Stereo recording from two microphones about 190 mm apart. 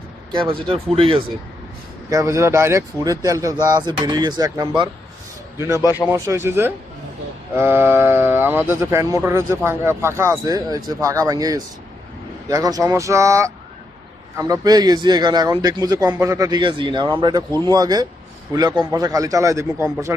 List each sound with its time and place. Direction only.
0.3 s a man's voice: 25° right (ahead or behind)
2.0 s a man's voice: 15° right (ahead or behind)
5.8 s speech: 15° left (ahead or behind)
6.1 s a man's voice: 15° right (ahead or behind)